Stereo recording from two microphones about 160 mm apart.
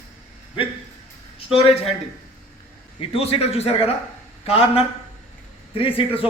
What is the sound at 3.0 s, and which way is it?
A man's voice, 35° left (ahead or behind).